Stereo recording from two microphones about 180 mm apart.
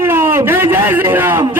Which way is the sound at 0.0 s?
10° right (ahead or behind).